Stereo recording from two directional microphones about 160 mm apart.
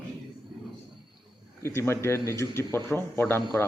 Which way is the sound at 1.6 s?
15° left (ahead or behind).